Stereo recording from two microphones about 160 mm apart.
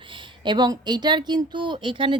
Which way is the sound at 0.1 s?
30° right (ahead or behind).